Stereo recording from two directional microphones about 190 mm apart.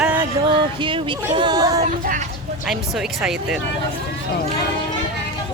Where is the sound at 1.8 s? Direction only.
45° right (ahead or behind).